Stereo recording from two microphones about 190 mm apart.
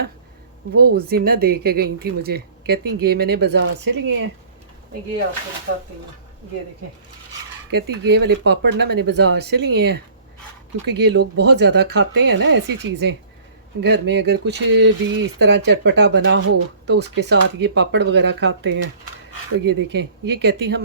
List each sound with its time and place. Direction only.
0.8 s speech: 55° right (ahead or behind)
7.7 s speech: 60° right (ahead or behind)